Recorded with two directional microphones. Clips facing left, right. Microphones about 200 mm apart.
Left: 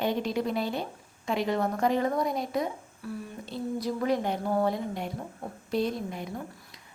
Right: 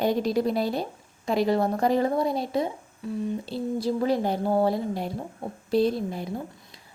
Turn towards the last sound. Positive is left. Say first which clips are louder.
# right 4 dB
turn(degrees=-30)  # may be behind; listen again after turning